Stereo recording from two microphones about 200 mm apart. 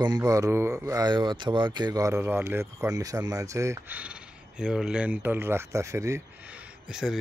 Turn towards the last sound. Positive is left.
turn(degrees=0)  # may be behind; listen again after turning